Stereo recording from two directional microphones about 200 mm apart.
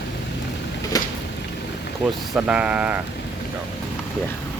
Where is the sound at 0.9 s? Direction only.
20° left (ahead or behind).